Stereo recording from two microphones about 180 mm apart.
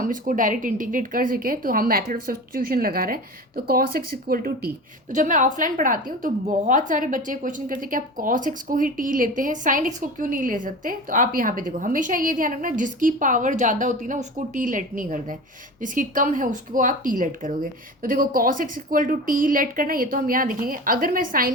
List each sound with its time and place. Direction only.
0.0 s speech: 50° right (ahead or behind)